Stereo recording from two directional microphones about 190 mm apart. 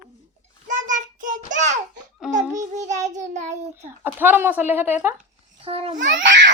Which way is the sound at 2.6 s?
40° right (ahead or behind).